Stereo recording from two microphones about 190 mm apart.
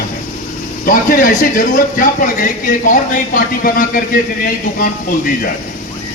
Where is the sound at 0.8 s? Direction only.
45° left (ahead or behind).